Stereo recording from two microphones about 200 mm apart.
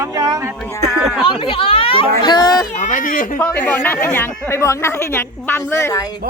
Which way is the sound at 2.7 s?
40° left (ahead or behind).